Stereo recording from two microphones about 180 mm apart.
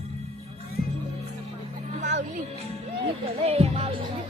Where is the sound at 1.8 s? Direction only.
40° right (ahead or behind).